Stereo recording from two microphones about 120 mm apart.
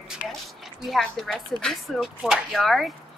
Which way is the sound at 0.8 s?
Centre (ahead or behind).